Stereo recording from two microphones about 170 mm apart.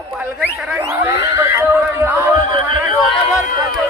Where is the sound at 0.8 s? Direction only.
20° right (ahead or behind).